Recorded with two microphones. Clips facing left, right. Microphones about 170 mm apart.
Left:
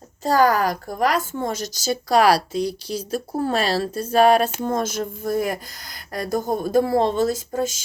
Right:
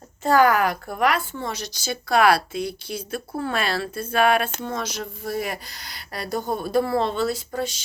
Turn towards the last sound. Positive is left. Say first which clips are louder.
# left 4 dB
turn(degrees=45)  # may be behind; listen again after turning